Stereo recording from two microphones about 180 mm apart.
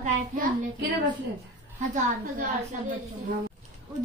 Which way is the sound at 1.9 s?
45° right (ahead or behind).